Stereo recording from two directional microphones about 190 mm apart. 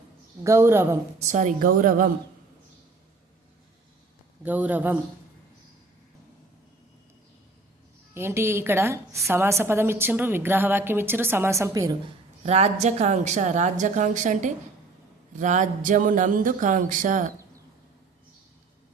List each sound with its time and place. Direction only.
0.4 s a woman's voice: 15° right (ahead or behind)
1.2 s speech: 40° right (ahead or behind)
4.4 s a woman's voice: 10° right (ahead or behind)
8.1 s a woman's voice: 15° right (ahead or behind)
12.4 s a woman's voice: 35° right (ahead or behind)